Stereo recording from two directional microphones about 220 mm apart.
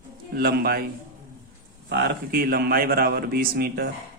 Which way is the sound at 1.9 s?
50° right (ahead or behind).